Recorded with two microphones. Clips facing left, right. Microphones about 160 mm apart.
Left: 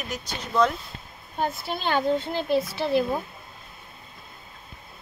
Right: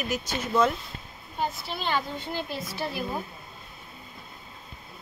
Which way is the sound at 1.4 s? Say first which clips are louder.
Left 3 dB; 50° left (ahead or behind).